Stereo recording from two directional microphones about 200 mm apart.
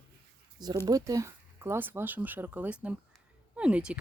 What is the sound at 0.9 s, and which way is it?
Speech, 15° right (ahead or behind).